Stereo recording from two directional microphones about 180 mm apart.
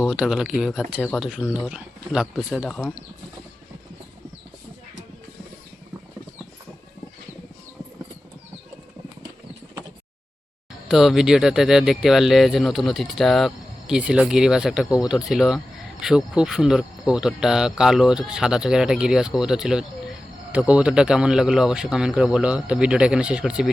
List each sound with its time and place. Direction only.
0.0 s speech: 5° right (ahead or behind)
10.8 s speech: centre (ahead or behind)